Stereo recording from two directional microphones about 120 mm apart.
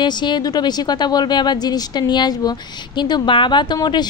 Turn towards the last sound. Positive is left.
turn(degrees=35)  # may be behind; listen again after turning